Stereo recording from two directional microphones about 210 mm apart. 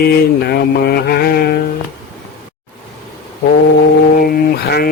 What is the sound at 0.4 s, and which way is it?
Mantra, 50° left (ahead or behind).